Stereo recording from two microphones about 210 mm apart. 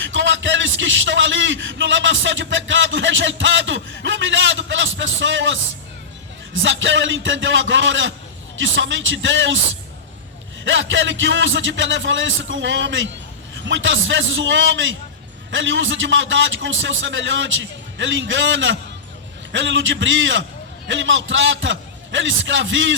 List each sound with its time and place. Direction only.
0.0 s a sound: 60° right (ahead or behind)
6.5 s a man's voice: 65° right (ahead or behind)
10.6 s a man's voice: 65° right (ahead or behind)